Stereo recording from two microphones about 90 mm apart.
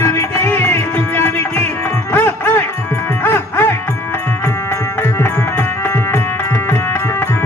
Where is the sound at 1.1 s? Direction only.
25° left (ahead or behind).